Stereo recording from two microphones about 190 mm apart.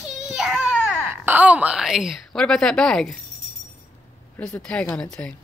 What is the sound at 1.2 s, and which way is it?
Speech, 10° right (ahead or behind).